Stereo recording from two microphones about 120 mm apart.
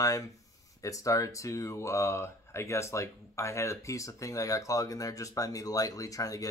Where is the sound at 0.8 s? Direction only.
25° left (ahead or behind).